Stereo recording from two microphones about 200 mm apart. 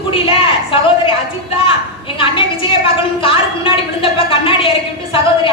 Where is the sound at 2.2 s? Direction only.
25° left (ahead or behind).